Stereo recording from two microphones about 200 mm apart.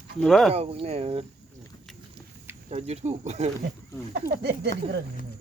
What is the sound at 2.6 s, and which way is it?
Speech, 30° right (ahead or behind).